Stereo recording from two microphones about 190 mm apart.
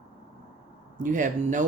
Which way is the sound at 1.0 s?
40° right (ahead or behind).